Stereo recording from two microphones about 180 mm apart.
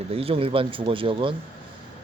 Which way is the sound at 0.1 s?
30° right (ahead or behind).